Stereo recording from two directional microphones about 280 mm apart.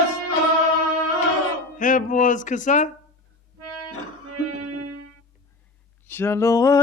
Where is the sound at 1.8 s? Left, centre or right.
Left.